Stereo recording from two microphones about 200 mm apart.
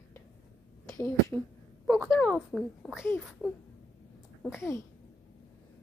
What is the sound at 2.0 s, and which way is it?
Speech, 5° left (ahead or behind).